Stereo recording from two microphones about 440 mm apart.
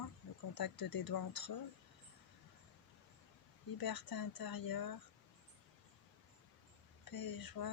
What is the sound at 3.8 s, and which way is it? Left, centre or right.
Speech, left.